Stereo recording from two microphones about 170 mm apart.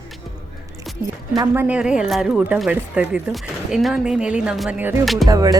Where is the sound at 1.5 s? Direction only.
10° right (ahead or behind).